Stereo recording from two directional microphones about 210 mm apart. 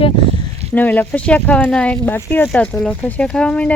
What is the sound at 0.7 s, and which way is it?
Speech, 10° left (ahead or behind).